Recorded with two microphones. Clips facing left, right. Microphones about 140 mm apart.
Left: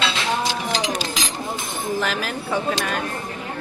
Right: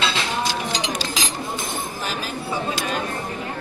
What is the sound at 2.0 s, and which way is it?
Speech, 75° left (ahead or behind).